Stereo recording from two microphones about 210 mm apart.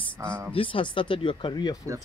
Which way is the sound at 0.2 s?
15° right (ahead or behind).